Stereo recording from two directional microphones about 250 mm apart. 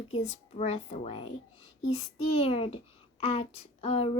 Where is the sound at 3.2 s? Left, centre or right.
Left.